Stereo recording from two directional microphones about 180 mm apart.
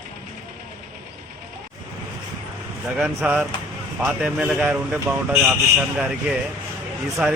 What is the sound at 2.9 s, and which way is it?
Speech, 5° right (ahead or behind).